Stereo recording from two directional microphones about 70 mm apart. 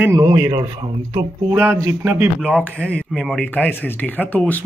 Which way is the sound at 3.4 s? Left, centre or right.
Left.